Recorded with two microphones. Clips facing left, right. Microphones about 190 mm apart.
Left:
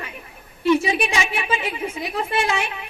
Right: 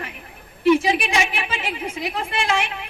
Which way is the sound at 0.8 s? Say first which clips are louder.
Right 1 dB; 65° right (ahead or behind).